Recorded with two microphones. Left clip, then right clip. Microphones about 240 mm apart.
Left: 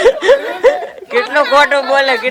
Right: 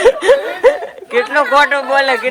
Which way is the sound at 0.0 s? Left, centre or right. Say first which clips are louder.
Left 1 dB; centre.